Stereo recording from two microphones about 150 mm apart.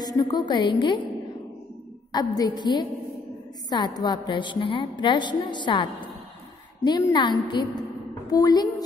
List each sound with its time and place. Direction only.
0.0 s a woman's voice: 25° left (ahead or behind)
2.1 s a woman's voice: 25° left (ahead or behind)